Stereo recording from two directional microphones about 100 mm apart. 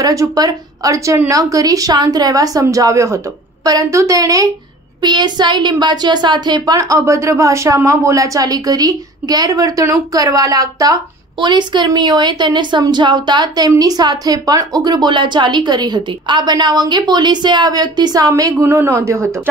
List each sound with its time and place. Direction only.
0.0 s a woman's voice: 35° right (ahead or behind)
5.0 s a woman's voice: 45° right (ahead or behind)
11.3 s a woman's voice: 50° right (ahead or behind); by 19.2 s 30° right (ahead or behind)